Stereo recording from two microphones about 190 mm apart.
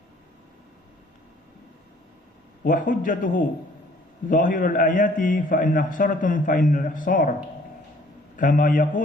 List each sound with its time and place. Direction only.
2.6 s a man's voice: 45° left (ahead or behind)
8.4 s a man's voice: 45° left (ahead or behind)